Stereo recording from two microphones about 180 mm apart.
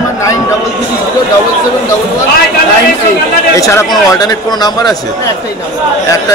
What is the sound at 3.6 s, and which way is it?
A man's voice, 15° left (ahead or behind).